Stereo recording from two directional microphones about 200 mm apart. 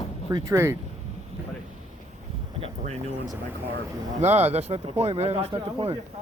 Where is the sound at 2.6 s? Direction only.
30° right (ahead or behind).